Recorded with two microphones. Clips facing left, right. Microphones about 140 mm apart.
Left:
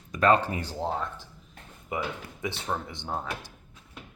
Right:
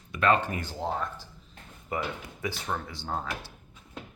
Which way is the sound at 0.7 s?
Centre (ahead or behind).